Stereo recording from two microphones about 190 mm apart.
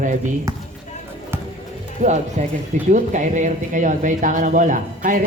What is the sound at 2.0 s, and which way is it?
Speech, 40° right (ahead or behind).